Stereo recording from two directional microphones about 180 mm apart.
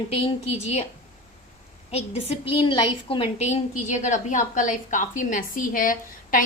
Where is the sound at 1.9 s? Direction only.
35° left (ahead or behind).